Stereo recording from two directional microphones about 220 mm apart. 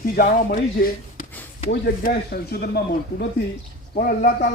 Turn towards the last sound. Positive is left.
turn(degrees=40)  # may be behind; listen again after turning